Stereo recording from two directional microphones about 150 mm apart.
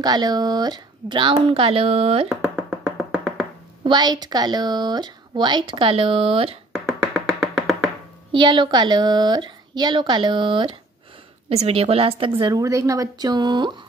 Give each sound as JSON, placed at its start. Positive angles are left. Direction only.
{"t": 0.0, "sound": "speech", "side_deg": -25}
{"t": 2.2, "sound": "music", "side_deg": -5}
{"t": 3.8, "sound": "speech", "side_deg": -30}
{"t": 6.7, "sound": "music", "side_deg": 0}
{"t": 8.3, "sound": "speech", "side_deg": -35}